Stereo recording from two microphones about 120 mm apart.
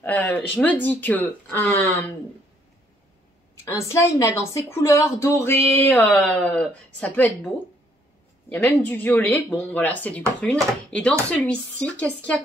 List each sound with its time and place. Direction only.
0.0 s speech: 15° left (ahead or behind)
3.6 s a woman's voice: 25° left (ahead or behind)